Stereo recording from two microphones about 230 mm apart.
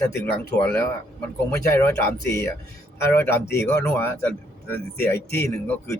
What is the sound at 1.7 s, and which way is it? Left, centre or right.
Speech, centre.